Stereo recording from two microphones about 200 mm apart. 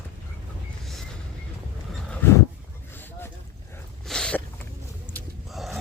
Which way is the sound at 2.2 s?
10° left (ahead or behind).